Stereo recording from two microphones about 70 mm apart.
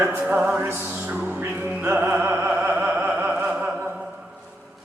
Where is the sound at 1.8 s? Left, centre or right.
Right.